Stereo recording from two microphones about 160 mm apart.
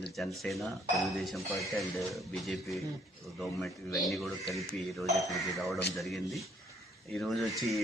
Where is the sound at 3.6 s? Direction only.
Centre (ahead or behind).